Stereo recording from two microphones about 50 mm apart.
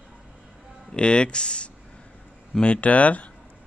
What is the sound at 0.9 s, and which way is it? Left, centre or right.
Speech, centre.